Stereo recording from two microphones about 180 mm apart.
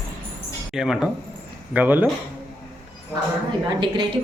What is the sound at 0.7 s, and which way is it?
Speech, 5° right (ahead or behind).